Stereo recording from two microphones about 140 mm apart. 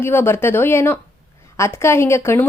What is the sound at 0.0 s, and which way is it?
Speech, 15° left (ahead or behind).